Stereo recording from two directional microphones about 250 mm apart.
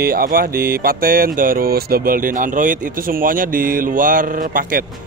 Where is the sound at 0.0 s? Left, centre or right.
Right.